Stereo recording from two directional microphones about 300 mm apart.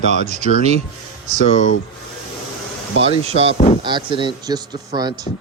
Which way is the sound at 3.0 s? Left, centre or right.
Centre.